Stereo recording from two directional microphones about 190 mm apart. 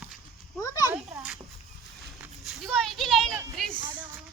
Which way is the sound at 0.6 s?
15° left (ahead or behind).